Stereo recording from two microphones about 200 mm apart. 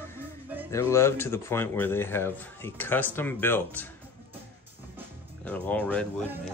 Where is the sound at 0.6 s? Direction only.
15° left (ahead or behind).